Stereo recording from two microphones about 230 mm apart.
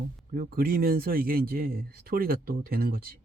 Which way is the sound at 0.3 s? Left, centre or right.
Right.